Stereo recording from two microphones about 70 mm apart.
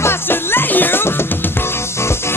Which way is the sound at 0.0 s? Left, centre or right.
Left.